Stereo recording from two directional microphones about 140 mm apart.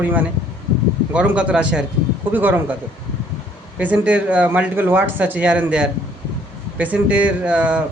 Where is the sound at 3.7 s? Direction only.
10° right (ahead or behind).